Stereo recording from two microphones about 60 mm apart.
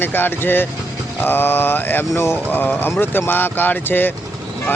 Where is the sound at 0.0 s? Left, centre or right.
Left.